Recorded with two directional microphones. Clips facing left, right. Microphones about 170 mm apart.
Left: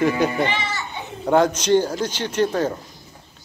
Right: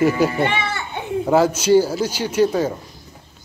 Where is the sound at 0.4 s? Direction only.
55° right (ahead or behind).